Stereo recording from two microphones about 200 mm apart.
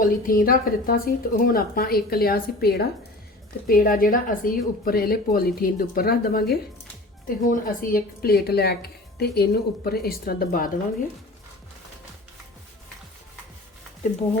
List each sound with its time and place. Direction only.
0.0 s a woman's voice: 45° left (ahead or behind)